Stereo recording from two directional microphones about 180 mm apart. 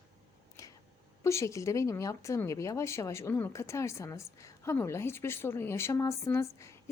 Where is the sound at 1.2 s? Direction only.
15° left (ahead or behind).